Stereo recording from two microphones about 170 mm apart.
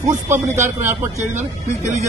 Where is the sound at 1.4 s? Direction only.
45° right (ahead or behind).